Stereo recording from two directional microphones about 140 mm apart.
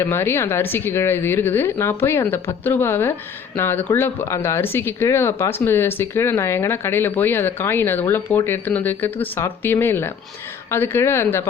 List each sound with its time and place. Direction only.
0.0 s speech: 15° left (ahead or behind)